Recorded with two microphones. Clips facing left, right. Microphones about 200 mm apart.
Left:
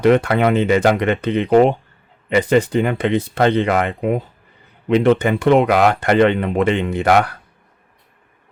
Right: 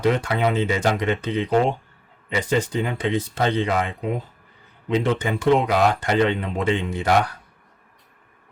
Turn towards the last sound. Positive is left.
turn(degrees=65)  # may be behind; listen again after turning